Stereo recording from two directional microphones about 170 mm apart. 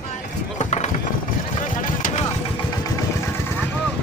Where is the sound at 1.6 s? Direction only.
50° left (ahead or behind).